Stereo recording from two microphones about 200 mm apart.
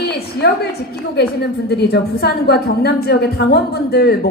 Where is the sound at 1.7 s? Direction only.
55° left (ahead or behind).